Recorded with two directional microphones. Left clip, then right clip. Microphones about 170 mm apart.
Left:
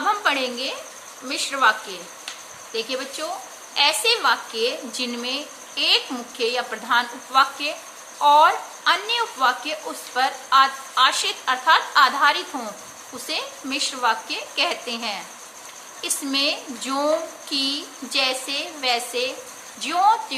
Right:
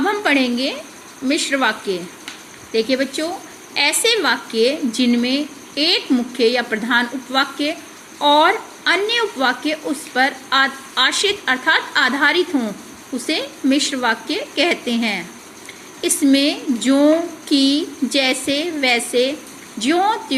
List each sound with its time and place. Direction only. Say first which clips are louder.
0.1 s a woman's voice: even; 15° right (ahead or behind)